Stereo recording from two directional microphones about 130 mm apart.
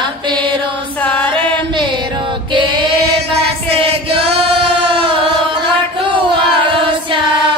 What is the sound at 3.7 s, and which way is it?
Chant, 45° right (ahead or behind).